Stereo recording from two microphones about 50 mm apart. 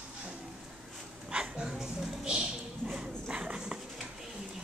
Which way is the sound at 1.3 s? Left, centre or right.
Centre.